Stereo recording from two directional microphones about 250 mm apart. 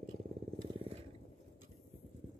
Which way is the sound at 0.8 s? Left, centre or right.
Right.